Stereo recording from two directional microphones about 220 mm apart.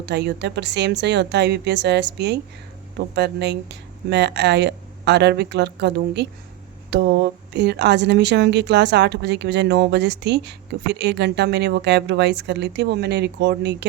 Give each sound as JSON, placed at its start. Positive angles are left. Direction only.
{"t": 0.0, "sound": "a woman's voice", "side_deg": -50}